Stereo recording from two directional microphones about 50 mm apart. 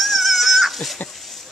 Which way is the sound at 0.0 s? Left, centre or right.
Centre.